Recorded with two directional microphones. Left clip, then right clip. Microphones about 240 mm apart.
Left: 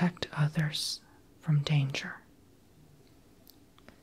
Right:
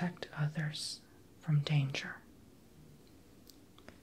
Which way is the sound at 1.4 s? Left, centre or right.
Centre.